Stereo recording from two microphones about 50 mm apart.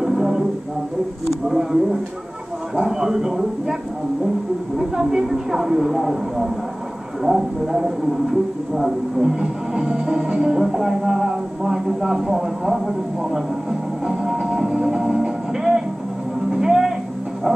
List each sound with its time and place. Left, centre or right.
0.0 s a sound: centre
1.3 s a woman's voice: centre
4.7 s a woman's voice: centre
16.4 s music: centre